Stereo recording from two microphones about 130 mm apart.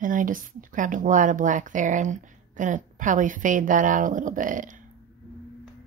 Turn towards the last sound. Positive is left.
turn(degrees=-85)